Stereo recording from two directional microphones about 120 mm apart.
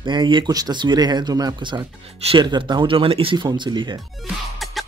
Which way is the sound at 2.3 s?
40° right (ahead or behind).